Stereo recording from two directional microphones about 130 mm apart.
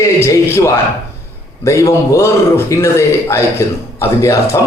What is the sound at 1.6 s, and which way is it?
A man's voice, 20° left (ahead or behind).